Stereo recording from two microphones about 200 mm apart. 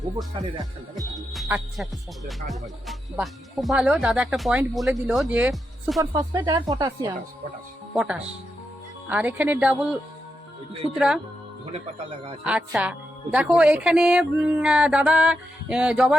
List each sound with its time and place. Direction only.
0.3 s speech: 20° right (ahead or behind)
1.1 s music: centre (ahead or behind)
5.3 s speech: 5° right (ahead or behind)
6.0 s speech: 20° right (ahead or behind)
7.9 s music: 5° right (ahead or behind)
9.0 s speech: 10° right (ahead or behind)
10.9 s music: 5° right (ahead or behind)
12.5 s music: 5° right (ahead or behind)